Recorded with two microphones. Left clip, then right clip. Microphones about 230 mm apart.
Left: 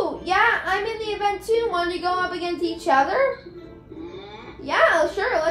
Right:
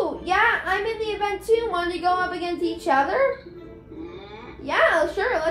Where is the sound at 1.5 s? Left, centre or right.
Centre.